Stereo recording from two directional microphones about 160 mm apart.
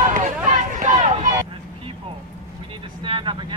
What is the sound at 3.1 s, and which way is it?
Vehicle, 30° right (ahead or behind).